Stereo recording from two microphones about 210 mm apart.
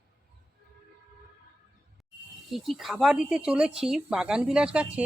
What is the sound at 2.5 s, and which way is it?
Speech, centre (ahead or behind).